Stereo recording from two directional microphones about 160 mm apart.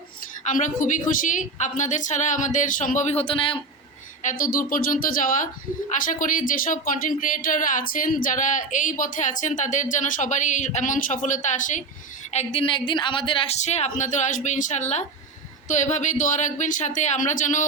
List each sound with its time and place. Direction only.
0.4 s a woman's voice: 55° left (ahead or behind); by 3.6 s 35° left (ahead or behind)
4.2 s speech: 55° left (ahead or behind)
12.3 s a woman's voice: 40° left (ahead or behind)